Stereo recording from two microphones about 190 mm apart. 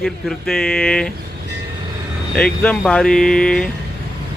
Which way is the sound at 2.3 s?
5° left (ahead or behind).